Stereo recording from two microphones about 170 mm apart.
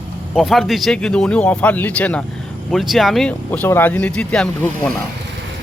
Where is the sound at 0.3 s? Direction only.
Centre (ahead or behind).